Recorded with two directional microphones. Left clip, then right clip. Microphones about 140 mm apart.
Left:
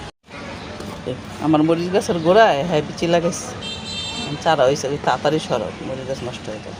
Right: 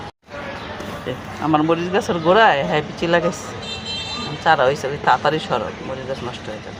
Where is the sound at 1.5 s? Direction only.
25° left (ahead or behind).